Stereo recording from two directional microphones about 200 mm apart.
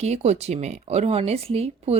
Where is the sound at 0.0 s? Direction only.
35° right (ahead or behind).